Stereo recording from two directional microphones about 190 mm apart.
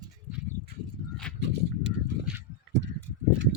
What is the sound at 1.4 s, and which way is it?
Horse, 65° right (ahead or behind).